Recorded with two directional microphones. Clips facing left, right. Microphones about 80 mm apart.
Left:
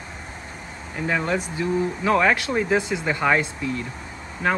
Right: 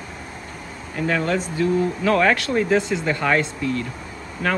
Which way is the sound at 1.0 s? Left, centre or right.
Centre.